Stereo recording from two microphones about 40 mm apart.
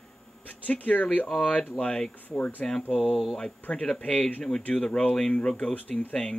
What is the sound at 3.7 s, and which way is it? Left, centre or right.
Speech, left.